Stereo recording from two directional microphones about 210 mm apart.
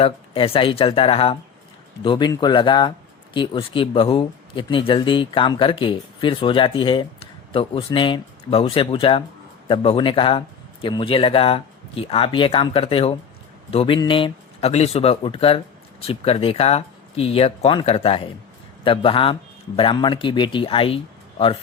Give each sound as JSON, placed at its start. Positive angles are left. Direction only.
{"t": 0.0, "sound": "speech", "side_deg": 25}